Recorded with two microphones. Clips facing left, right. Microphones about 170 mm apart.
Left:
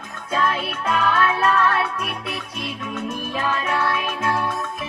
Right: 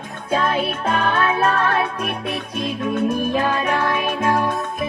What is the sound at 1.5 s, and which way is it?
Music, 35° right (ahead or behind).